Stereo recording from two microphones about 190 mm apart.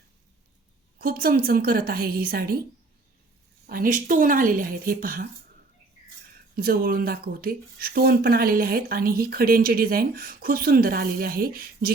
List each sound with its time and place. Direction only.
0.9 s speech: 50° right (ahead or behind)
3.7 s speech: 45° right (ahead or behind)
6.6 s speech: 50° right (ahead or behind)